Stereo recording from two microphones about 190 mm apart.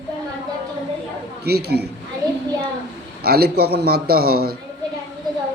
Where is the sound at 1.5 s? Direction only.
55° right (ahead or behind).